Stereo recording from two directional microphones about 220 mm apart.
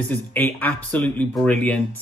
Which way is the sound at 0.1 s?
10° left (ahead or behind).